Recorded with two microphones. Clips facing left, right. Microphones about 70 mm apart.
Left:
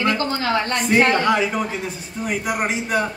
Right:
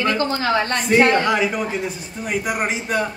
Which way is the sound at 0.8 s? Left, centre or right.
Centre.